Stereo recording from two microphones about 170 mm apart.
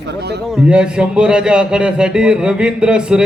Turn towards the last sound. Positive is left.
turn(degrees=-5)  # may be behind; listen again after turning